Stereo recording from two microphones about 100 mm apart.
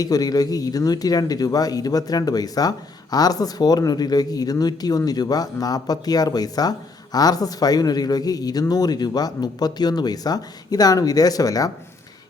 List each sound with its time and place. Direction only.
0.0 s speech: 40° left (ahead or behind)